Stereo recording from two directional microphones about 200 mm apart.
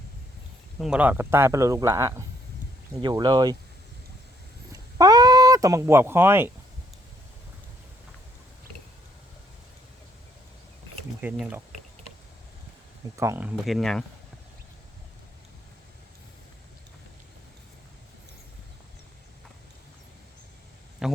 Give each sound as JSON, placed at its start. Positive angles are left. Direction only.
{"t": 0.8, "sound": "speech", "side_deg": -5}
{"t": 4.7, "sound": "a sound", "side_deg": -20}
{"t": 11.2, "sound": "speech", "side_deg": -10}
{"t": 13.1, "sound": "speech", "side_deg": -10}
{"t": 13.7, "sound": "speech", "side_deg": 0}
{"t": 21.0, "sound": "a sound", "side_deg": -5}